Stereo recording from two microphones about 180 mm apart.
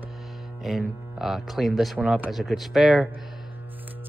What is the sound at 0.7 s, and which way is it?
A man's voice, centre (ahead or behind).